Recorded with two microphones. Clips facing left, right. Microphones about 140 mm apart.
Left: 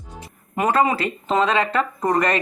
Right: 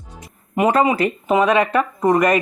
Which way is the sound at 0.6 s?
20° right (ahead or behind).